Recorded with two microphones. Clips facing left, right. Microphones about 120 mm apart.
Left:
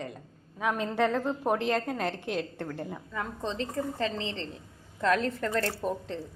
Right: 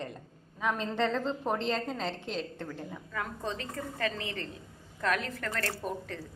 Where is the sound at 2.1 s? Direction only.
60° left (ahead or behind).